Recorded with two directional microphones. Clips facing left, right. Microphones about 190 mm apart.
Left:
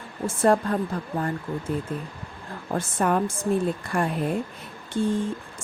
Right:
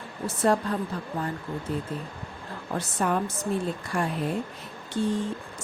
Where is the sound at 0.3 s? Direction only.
55° left (ahead or behind).